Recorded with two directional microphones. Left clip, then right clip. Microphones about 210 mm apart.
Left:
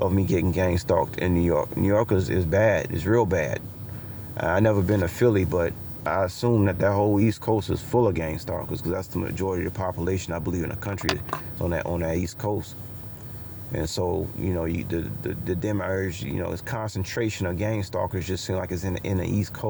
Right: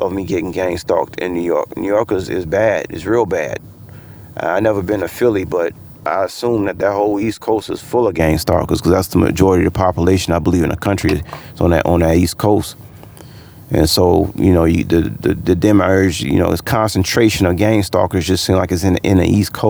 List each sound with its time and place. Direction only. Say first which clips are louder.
0.0 s speech: right 6 dB; 45° right (ahead or behind)
13.7 s speech: right 15 dB; 45° right (ahead or behind)